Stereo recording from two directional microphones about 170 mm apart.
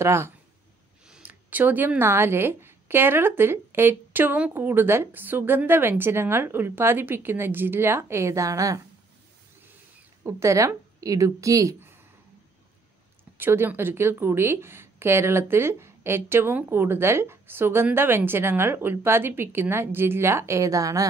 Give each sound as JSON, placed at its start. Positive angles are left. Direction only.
{"t": 0.0, "sound": "speech", "side_deg": -15}
{"t": 10.2, "sound": "a woman's voice", "side_deg": -15}
{"t": 13.4, "sound": "speech", "side_deg": -15}